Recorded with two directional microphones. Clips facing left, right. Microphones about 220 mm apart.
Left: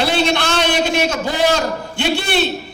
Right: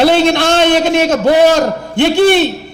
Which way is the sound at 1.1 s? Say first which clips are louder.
Right 9 dB; 55° right (ahead or behind).